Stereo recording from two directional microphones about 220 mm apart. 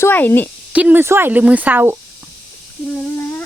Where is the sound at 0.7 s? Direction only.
5° right (ahead or behind).